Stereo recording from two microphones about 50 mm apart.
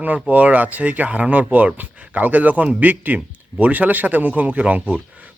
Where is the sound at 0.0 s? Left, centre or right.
Right.